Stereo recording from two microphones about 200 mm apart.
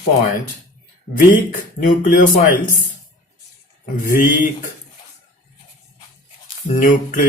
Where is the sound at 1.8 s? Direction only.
45° left (ahead or behind).